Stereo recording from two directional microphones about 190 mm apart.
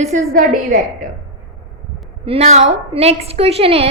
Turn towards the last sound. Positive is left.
turn(degrees=-30)  # may be behind; listen again after turning